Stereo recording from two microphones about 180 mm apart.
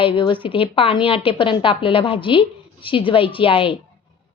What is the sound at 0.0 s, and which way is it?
Speech, 30° left (ahead or behind).